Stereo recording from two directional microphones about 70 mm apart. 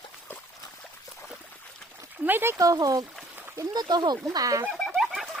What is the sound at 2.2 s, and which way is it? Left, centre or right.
Speech, right.